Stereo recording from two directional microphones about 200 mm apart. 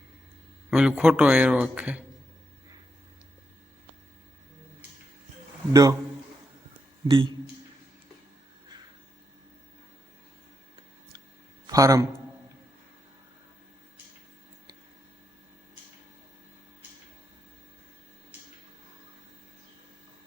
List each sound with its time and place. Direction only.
0.7 s a man's voice: 5° right (ahead or behind)
5.7 s a man's voice: 15° right (ahead or behind)
7.1 s a man's voice: 25° right (ahead or behind)
11.6 s a man's voice: 15° right (ahead or behind)